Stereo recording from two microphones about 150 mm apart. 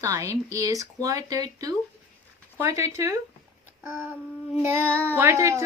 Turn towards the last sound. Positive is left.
turn(degrees=-20)  # may be behind; listen again after turning